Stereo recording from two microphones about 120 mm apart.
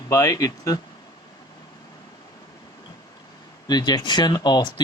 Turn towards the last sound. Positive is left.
turn(degrees=35)  # may be behind; listen again after turning